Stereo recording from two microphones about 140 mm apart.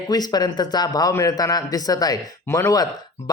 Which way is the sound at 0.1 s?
30° left (ahead or behind).